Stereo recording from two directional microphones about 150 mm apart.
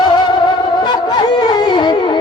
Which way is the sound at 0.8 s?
30° left (ahead or behind).